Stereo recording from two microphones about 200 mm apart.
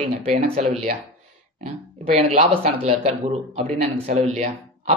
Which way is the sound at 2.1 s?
30° right (ahead or behind).